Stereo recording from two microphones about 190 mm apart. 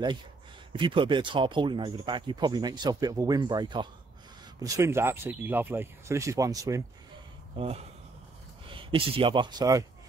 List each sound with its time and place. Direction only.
0.7 s speech: 25° right (ahead or behind)
7.5 s speech: 30° right (ahead or behind)